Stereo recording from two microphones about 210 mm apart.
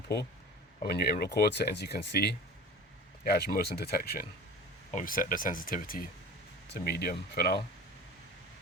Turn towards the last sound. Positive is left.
turn(degrees=50)  # may be behind; listen again after turning